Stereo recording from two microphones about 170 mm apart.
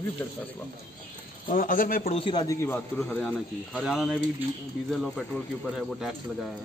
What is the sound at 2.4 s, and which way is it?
A man's voice, 15° left (ahead or behind).